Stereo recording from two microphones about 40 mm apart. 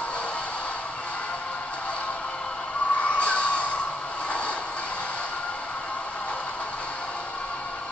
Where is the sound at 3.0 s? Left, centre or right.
Left.